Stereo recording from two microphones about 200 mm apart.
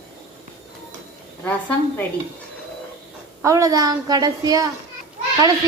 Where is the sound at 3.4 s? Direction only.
15° right (ahead or behind).